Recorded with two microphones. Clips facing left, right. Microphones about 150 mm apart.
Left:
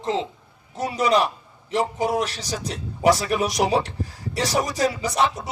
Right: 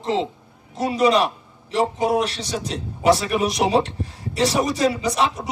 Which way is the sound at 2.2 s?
30° right (ahead or behind).